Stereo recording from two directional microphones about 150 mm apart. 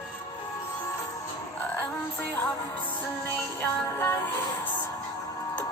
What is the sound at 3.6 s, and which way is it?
Music, 20° left (ahead or behind).